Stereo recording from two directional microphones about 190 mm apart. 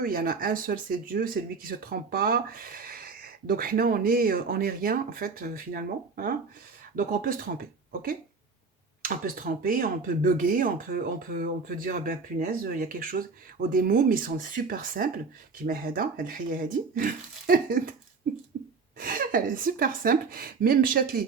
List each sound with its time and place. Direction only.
0.0 s speech: 50° right (ahead or behind)
18.9 s speech: 50° right (ahead or behind)